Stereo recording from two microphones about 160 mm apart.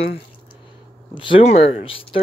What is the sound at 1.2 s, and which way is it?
Speech, 40° left (ahead or behind).